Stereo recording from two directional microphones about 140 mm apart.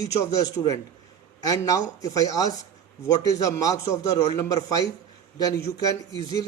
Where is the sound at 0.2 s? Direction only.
25° left (ahead or behind).